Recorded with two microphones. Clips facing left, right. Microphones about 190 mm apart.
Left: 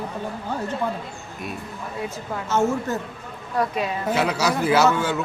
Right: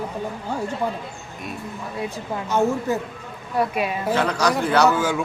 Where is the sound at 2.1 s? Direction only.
15° right (ahead or behind).